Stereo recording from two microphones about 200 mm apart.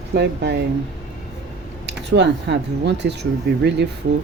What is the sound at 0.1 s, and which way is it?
Speech, 55° right (ahead or behind).